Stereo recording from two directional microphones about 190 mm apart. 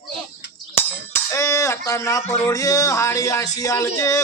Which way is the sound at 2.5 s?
15° left (ahead or behind).